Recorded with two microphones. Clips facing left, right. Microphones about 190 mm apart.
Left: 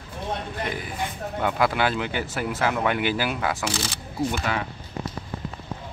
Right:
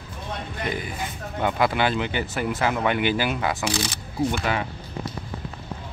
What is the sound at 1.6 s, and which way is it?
Speech, 5° left (ahead or behind).